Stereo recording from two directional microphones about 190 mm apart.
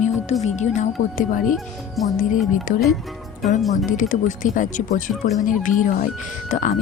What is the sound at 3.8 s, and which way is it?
Speech, 45° left (ahead or behind).